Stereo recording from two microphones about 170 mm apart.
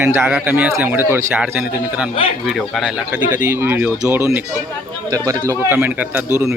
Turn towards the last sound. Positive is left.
turn(degrees=-10)  # may be behind; listen again after turning